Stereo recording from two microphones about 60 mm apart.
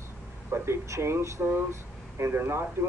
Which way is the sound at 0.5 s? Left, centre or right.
Right.